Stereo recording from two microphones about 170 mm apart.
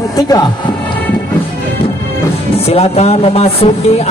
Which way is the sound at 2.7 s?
35° left (ahead or behind).